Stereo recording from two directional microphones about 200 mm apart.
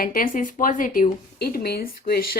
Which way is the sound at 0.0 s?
45° left (ahead or behind).